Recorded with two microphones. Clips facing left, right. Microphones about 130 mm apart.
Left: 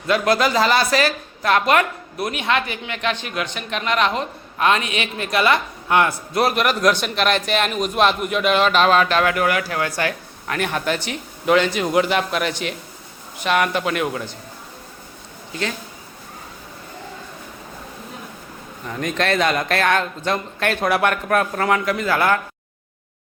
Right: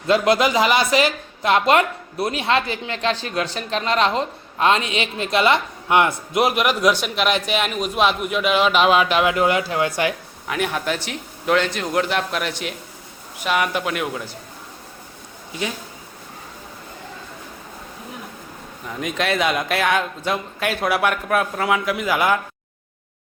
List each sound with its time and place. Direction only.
0.1 s a woman's voice: 20° right (ahead or behind)
10.4 s a man's voice: 5° right (ahead or behind)
18.9 s a man's voice: 5° right (ahead or behind)